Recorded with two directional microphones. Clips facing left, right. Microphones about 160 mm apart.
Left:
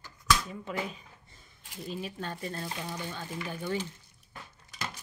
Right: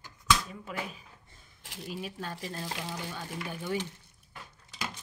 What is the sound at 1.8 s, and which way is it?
Mantra, 5° right (ahead or behind).